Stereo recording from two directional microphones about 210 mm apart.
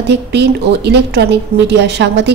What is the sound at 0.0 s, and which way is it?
A woman's voice, 55° right (ahead or behind).